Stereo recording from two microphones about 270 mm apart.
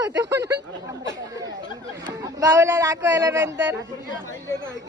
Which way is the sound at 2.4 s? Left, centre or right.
Centre.